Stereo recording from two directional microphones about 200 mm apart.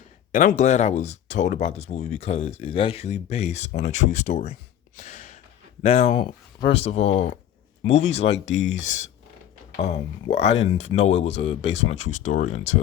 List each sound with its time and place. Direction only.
0.3 s speech: 40° left (ahead or behind)
4.9 s gasp: 35° left (ahead or behind)
5.8 s speech: 30° left (ahead or behind)